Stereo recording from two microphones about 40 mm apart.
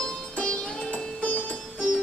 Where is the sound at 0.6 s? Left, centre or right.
Centre.